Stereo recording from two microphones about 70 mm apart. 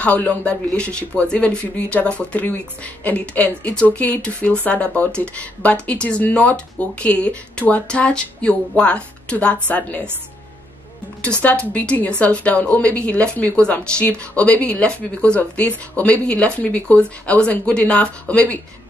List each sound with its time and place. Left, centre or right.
0.0 s speech: left
11.7 s speech: centre